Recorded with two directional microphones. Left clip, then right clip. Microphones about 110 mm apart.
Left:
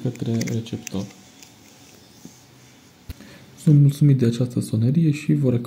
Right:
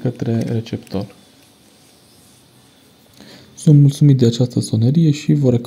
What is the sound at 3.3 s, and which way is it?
Speech, 45° right (ahead or behind).